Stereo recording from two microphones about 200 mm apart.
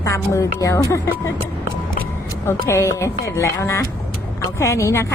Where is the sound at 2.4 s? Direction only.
15° left (ahead or behind).